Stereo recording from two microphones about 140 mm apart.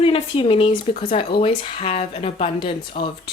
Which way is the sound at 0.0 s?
40° left (ahead or behind).